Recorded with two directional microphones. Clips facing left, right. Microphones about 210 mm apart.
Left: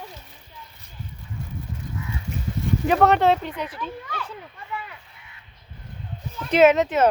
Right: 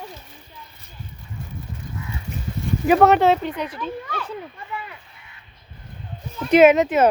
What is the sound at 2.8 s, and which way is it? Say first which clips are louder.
Speech: right 3 dB; 5° right (ahead or behind).